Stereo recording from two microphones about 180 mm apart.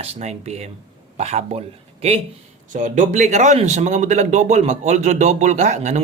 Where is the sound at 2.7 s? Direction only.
45° right (ahead or behind).